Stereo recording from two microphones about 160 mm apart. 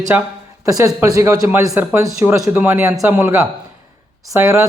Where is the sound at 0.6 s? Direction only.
20° right (ahead or behind).